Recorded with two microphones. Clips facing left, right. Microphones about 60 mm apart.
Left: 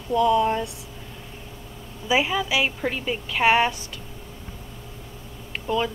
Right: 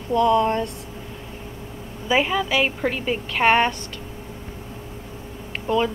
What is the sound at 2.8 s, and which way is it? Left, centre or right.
Speech, centre.